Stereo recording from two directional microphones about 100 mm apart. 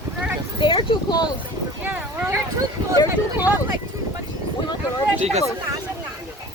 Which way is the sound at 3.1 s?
20° right (ahead or behind).